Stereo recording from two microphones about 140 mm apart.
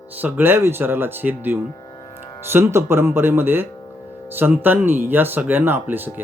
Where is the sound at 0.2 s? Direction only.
15° right (ahead or behind).